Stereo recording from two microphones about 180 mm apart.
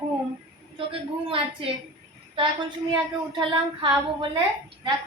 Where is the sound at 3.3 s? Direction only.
30° right (ahead or behind).